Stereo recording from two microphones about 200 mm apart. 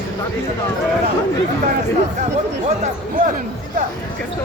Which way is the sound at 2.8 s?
40° right (ahead or behind).